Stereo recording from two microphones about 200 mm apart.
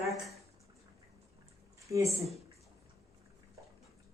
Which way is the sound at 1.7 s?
15° right (ahead or behind).